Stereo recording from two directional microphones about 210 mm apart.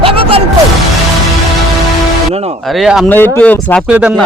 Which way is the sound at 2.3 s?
30° right (ahead or behind).